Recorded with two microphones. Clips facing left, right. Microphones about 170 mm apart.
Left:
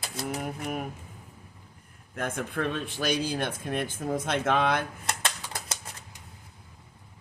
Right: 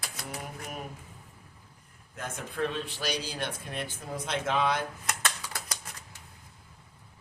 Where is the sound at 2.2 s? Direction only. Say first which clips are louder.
Left 3 dB; 55° left (ahead or behind).